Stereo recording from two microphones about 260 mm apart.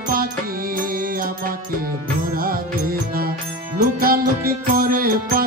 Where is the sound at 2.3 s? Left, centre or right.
Right.